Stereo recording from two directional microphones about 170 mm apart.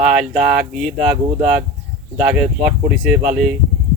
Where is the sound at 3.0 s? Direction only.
5° right (ahead or behind).